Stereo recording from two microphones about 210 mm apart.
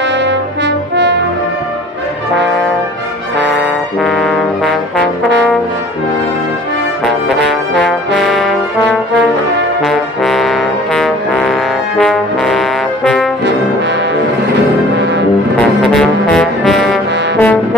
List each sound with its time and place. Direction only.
0.2 s brass instrument: 55° right (ahead or behind)
4.0 s trombone: centre (ahead or behind)
8.2 s trombone: centre (ahead or behind)
9.8 s trombone: centre (ahead or behind)
15.9 s brass instrument: centre (ahead or behind)